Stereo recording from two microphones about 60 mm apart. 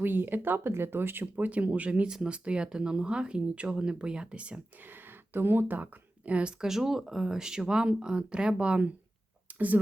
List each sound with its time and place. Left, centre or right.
0.0 s speech: right; by 4.6 s centre
4.9 s speech: right
6.6 s speech: centre; by 9.8 s right